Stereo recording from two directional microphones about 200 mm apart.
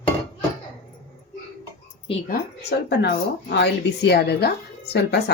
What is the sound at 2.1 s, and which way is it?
Speech, 30° left (ahead or behind).